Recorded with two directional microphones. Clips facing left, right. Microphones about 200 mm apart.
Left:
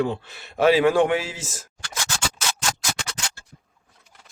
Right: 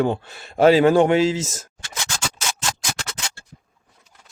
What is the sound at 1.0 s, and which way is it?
Speech, 25° right (ahead or behind).